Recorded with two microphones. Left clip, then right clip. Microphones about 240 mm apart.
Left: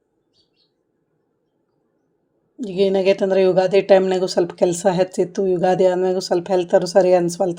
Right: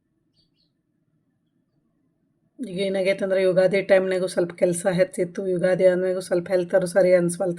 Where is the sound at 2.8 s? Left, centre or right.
Centre.